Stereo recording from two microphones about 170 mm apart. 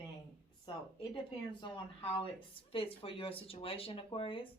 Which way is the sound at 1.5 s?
30° left (ahead or behind).